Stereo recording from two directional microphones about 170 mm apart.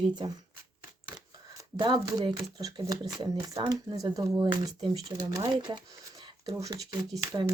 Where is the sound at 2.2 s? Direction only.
25° right (ahead or behind).